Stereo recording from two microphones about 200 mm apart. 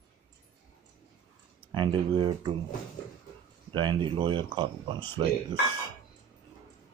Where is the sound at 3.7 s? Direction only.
25° right (ahead or behind).